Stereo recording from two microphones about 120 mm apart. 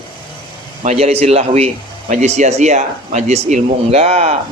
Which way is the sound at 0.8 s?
70° right (ahead or behind).